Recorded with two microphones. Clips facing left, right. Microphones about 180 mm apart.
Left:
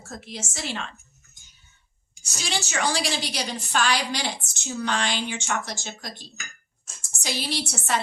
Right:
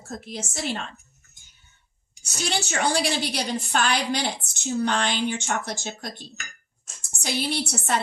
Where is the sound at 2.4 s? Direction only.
55° right (ahead or behind).